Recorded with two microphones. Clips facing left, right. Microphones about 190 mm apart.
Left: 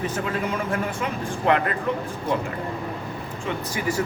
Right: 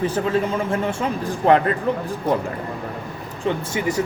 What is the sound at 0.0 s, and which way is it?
Speech, 30° right (ahead or behind).